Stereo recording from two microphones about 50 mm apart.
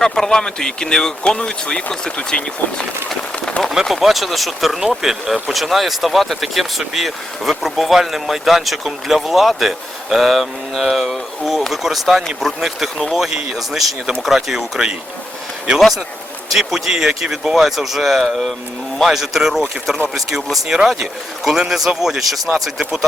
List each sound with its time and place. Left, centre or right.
0.0 s speech: centre
3.8 s speech: centre
15.8 s speech: centre